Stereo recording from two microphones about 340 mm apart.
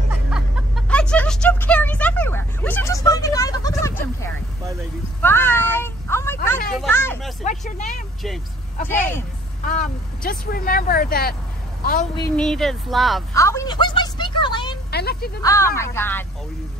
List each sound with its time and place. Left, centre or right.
0.3 s a sound: centre
7.4 s speech: left
8.8 s speech: centre
9.7 s a woman's voice: left
12.2 s a woman's voice: centre
14.9 s a sound: left
15.4 s speech: centre